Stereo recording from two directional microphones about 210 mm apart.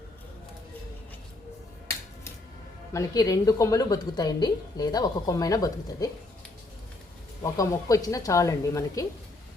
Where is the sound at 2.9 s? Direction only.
15° left (ahead or behind).